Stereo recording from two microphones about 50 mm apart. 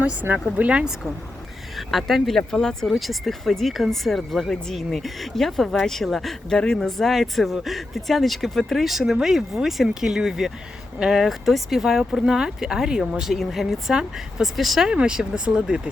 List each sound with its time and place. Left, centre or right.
0.0 s speech: right
1.7 s speech: centre
2.8 s speech: centre
11.3 s speech: centre
13.9 s speech: centre
14.5 s speech: centre
14.8 s speech: centre